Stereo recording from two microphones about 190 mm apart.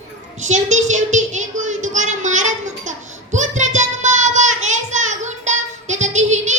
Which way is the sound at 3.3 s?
40° right (ahead or behind).